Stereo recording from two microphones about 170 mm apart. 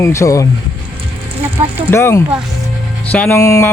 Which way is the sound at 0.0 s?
15° left (ahead or behind).